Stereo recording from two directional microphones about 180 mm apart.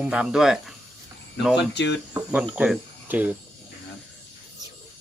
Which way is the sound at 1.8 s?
75° left (ahead or behind).